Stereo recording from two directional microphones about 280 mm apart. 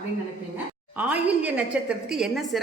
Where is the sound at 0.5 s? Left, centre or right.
Centre.